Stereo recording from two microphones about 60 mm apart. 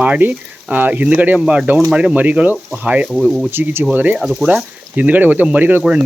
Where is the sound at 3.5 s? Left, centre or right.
Right.